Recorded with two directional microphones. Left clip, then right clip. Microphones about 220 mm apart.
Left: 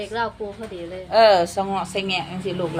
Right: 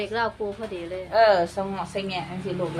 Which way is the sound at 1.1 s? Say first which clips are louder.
Left 4 dB; 50° left (ahead or behind).